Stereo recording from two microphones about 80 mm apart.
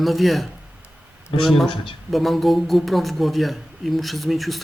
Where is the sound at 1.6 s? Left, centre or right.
Left.